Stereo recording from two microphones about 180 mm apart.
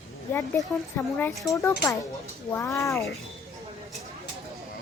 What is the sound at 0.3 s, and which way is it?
Speech, 10° left (ahead or behind).